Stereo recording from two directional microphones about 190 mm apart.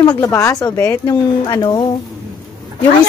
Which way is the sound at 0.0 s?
20° left (ahead or behind).